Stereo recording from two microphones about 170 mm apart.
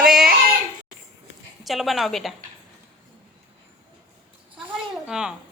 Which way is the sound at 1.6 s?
Centre (ahead or behind).